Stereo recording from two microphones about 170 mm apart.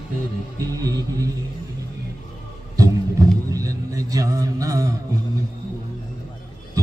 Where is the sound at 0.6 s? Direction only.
20° right (ahead or behind).